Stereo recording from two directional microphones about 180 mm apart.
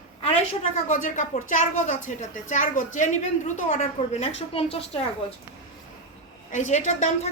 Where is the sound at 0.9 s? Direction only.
45° left (ahead or behind).